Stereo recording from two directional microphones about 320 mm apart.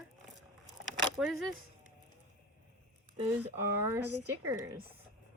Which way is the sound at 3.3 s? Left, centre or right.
Centre.